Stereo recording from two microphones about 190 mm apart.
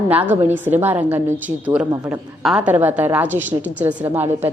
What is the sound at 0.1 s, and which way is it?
A woman's voice, 10° right (ahead or behind).